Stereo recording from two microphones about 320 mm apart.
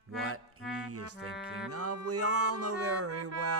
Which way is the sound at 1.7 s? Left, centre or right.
Right.